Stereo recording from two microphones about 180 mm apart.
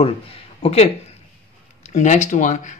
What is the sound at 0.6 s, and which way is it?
Speech, 35° left (ahead or behind).